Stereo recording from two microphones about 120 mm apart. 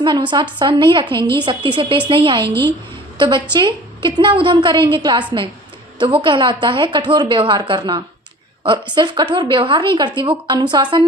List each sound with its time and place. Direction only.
0.0 s a woman's voice: 40° right (ahead or behind)